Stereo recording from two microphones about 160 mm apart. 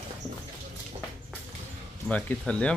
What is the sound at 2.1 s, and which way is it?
Speech, 5° left (ahead or behind).